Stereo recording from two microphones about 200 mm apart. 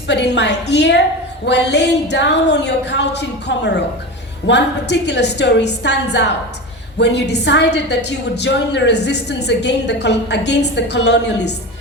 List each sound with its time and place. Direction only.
0.1 s a woman's voice: 60° left (ahead or behind)